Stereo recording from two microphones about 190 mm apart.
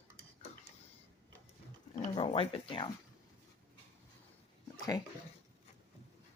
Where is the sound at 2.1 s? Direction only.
25° left (ahead or behind).